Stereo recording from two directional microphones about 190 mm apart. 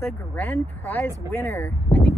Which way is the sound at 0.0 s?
10° left (ahead or behind).